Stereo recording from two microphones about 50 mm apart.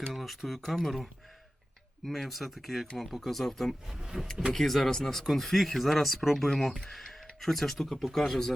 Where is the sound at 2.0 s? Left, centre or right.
Centre.